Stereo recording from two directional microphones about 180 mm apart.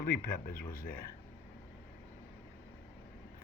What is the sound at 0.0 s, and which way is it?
Speech, 50° left (ahead or behind).